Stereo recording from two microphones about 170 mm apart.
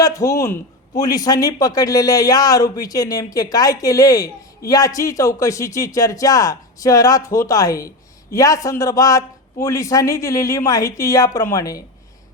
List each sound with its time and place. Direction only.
0.0 s a man's voice: 20° left (ahead or behind)